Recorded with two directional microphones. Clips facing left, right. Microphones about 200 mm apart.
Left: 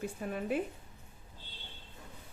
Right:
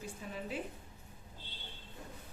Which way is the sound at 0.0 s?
60° left (ahead or behind).